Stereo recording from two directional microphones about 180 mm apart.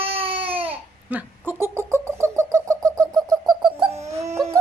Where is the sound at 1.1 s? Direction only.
10° right (ahead or behind).